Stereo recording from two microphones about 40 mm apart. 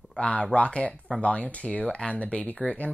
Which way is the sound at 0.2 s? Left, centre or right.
Left.